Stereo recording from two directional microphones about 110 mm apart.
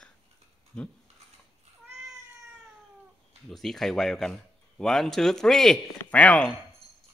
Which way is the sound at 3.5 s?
5° left (ahead or behind).